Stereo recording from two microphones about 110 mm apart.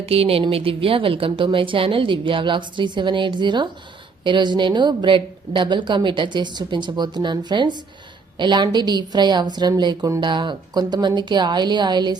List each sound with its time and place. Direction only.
0.1 s a woman's voice: 60° right (ahead or behind); by 12.1 s 40° right (ahead or behind)